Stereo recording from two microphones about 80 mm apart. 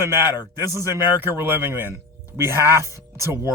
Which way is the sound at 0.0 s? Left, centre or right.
Right.